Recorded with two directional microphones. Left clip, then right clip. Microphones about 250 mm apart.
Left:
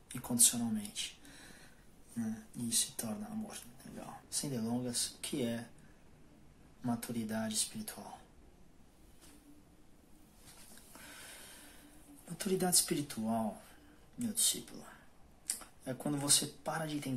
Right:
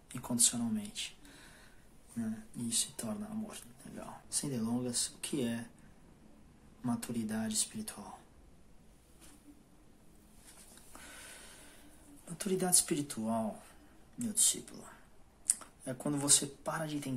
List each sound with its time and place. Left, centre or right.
0.1 s speech: centre
2.7 s speech: centre
6.8 s speech: centre
11.1 s snort: centre
12.4 s speech: centre